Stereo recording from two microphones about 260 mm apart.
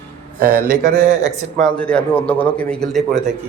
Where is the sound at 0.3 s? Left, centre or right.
Right.